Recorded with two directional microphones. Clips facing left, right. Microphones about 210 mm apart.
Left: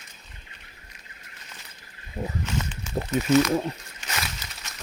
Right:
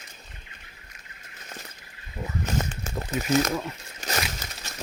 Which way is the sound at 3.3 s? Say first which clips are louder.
Left 4 dB; 40° right (ahead or behind).